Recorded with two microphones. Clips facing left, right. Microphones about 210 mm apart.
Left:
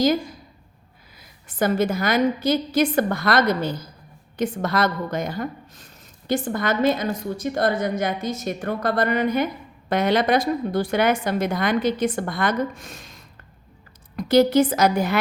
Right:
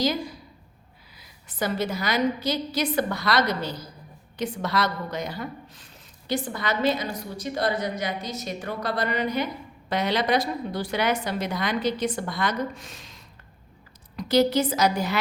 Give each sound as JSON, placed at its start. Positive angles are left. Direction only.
{"t": 0.0, "sound": "a woman's voice", "side_deg": 50}